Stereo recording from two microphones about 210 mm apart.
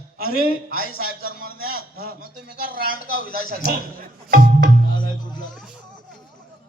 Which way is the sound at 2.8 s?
40° left (ahead or behind).